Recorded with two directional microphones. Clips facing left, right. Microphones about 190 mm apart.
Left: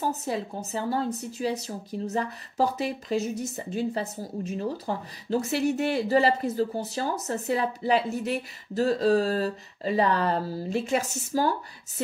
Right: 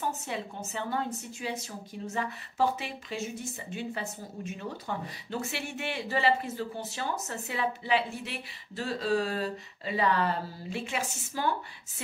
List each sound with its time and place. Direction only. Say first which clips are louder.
0.0 s a woman's voice: left 5 dB; 35° left (ahead or behind)